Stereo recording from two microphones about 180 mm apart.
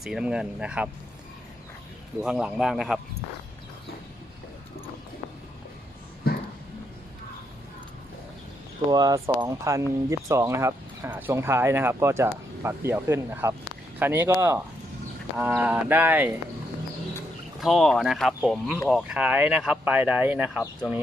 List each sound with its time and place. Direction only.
0.0 s speech: 5° right (ahead or behind)
2.2 s speech: 5° right (ahead or behind)
8.9 s speech: 20° right (ahead or behind)
17.6 s speech: centre (ahead or behind)